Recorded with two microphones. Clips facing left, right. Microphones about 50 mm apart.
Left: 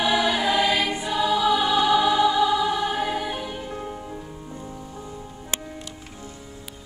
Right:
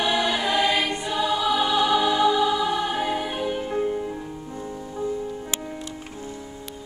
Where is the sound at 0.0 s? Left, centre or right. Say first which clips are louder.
Left 1 dB; centre.